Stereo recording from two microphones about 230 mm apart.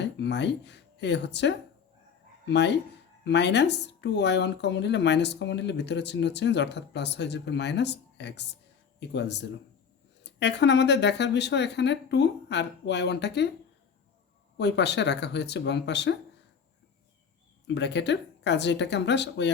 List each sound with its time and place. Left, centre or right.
0.0 s speech: left
14.6 s speech: left
17.7 s speech: left